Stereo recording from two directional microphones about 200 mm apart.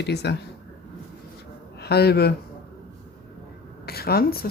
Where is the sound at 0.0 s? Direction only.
55° left (ahead or behind).